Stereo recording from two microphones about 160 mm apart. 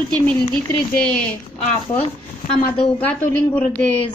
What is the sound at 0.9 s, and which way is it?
Speech, 5° left (ahead or behind).